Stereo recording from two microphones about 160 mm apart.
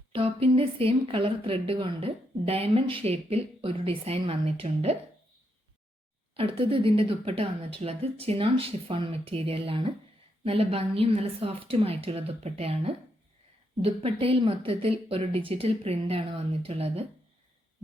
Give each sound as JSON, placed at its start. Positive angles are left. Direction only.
{"t": 0.1, "sound": "a woman's voice", "side_deg": -35}
{"t": 6.3, "sound": "a woman's voice", "side_deg": -35}